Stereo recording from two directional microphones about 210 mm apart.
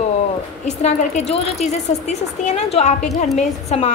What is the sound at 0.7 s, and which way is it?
A woman's voice, 30° left (ahead or behind).